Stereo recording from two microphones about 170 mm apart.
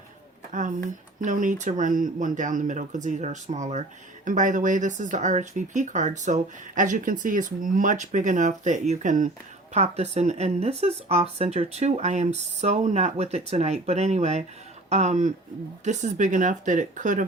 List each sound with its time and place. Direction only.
0.5 s speech: 50° right (ahead or behind)